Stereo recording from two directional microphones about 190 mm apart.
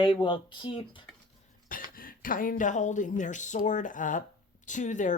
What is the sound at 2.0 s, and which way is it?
Speech, 50° left (ahead or behind).